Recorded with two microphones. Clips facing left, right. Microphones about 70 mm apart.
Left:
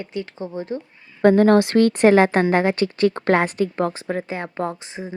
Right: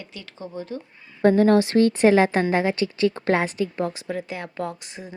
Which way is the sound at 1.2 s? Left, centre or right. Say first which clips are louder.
Left 3 dB; left.